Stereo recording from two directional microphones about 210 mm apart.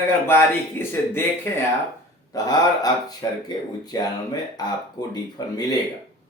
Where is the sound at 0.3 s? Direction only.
10° left (ahead or behind).